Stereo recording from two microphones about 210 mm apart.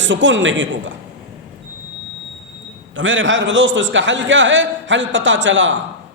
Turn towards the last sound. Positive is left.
turn(degrees=-60)  # may be behind; listen again after turning